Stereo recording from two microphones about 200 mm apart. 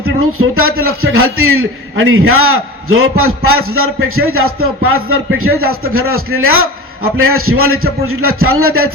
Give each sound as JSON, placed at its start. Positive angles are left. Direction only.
{"t": 0.2, "sound": "a man's voice", "side_deg": -90}